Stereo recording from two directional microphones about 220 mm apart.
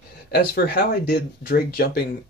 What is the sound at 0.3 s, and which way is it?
Speech, 40° left (ahead or behind).